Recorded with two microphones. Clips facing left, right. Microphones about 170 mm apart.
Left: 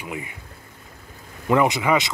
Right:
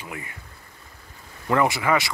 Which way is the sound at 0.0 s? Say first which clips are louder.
Left 4 dB; 20° left (ahead or behind).